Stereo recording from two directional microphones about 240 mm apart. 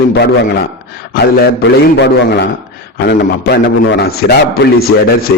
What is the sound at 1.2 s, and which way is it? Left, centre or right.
A man's voice, left.